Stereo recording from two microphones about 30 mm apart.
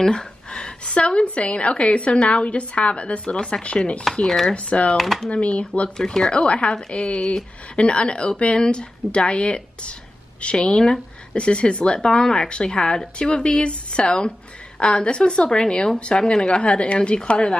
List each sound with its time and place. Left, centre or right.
0.0 s a sound: left
0.9 s a woman's voice: left
3.6 s chopping: left
4.9 s speech: centre
5.3 s chopping: left
5.9 s speech: centre
6.3 s a woman's voice: left